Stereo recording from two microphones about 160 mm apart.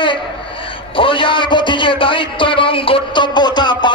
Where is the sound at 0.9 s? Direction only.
30° left (ahead or behind).